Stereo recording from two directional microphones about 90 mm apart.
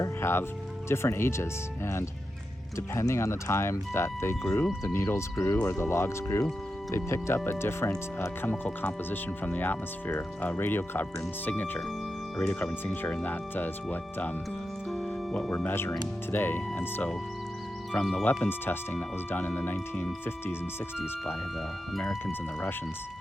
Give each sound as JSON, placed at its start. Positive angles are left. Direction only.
{"t": 0.0, "sound": "speech", "side_deg": 30}
{"t": 15.6, "sound": "speech", "side_deg": 25}
{"t": 21.9, "sound": "speech", "side_deg": 5}